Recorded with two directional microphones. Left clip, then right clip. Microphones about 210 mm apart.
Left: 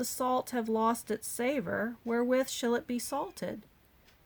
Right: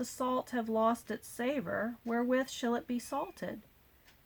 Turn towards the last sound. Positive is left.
turn(degrees=40)  # may be behind; listen again after turning